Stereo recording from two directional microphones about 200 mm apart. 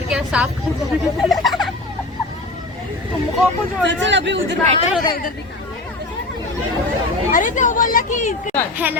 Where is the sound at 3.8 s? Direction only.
65° right (ahead or behind).